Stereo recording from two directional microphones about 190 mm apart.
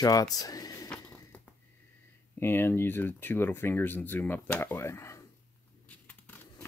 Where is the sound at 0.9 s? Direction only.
5° left (ahead or behind).